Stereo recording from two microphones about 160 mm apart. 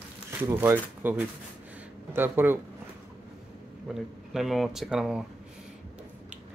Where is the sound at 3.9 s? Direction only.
Centre (ahead or behind).